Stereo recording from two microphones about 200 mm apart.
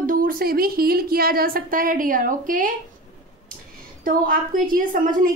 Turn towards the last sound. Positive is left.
turn(degrees=-45)  # may be behind; listen again after turning